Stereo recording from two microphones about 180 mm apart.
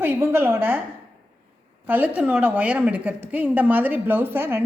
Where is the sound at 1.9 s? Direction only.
10° right (ahead or behind).